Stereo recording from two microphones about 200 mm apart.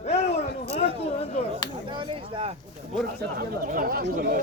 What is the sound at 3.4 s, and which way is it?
Speech, 45° right (ahead or behind).